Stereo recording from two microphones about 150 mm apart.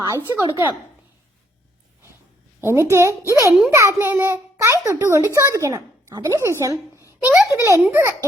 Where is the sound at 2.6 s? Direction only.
20° right (ahead or behind).